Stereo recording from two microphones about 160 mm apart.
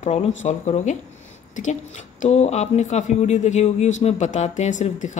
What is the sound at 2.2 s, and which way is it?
Speech, 45° left (ahead or behind).